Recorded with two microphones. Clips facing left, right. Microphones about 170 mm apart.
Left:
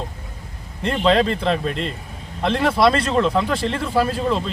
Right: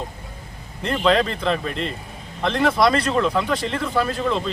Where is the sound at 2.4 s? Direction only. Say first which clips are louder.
Left 1 dB; centre (ahead or behind).